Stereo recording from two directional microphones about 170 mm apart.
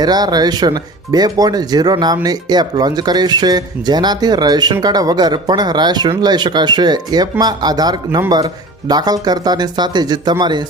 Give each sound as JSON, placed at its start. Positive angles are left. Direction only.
{"t": 0.0, "sound": "speech", "side_deg": -25}